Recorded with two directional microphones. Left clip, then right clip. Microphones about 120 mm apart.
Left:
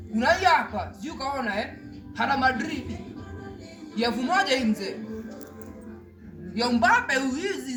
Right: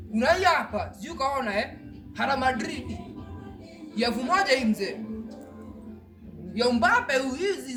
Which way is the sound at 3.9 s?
40° right (ahead or behind).